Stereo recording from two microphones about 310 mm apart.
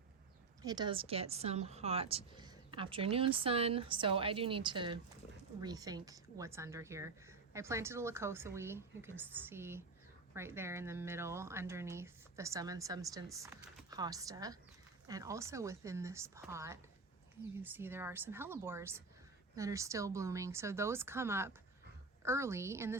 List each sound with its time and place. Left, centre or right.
0.6 s a woman's voice: centre